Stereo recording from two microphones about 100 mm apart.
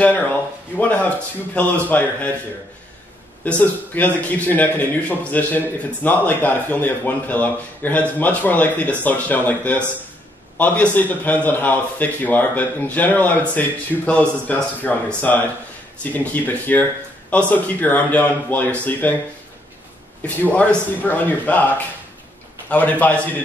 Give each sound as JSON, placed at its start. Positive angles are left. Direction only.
{"t": 0.0, "sound": "a man's voice", "side_deg": 15}
{"t": 3.4, "sound": "a man's voice", "side_deg": 15}
{"t": 20.4, "sound": "a man's voice", "side_deg": 15}